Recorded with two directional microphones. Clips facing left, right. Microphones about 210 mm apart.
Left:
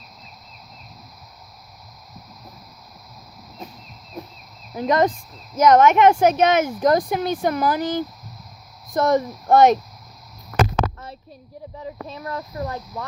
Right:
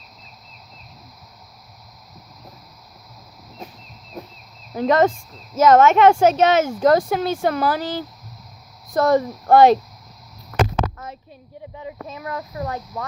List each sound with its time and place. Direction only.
4.8 s speech: 15° left (ahead or behind)
12.0 s speech: 35° left (ahead or behind)